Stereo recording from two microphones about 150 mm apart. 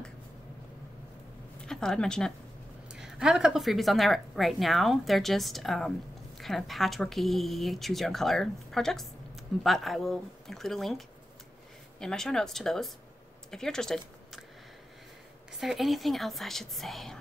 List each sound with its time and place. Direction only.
1.6 s speech: 5° left (ahead or behind)
15.6 s speech: centre (ahead or behind)